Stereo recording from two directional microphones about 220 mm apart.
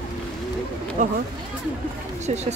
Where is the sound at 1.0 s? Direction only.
35° right (ahead or behind).